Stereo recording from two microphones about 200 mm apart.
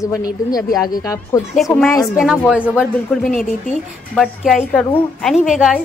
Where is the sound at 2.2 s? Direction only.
Centre (ahead or behind).